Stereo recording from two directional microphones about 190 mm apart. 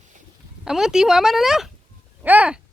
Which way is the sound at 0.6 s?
5° right (ahead or behind).